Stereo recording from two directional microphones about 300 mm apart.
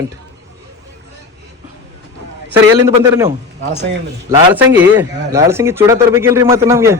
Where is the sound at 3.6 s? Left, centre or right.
Right.